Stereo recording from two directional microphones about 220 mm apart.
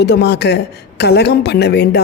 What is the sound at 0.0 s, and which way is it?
A woman's voice, 50° left (ahead or behind).